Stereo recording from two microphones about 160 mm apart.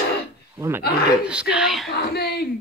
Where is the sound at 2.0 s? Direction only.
90° left.